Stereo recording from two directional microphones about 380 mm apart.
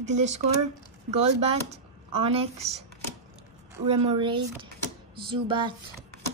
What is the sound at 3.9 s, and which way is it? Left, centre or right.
A woman's voice, centre.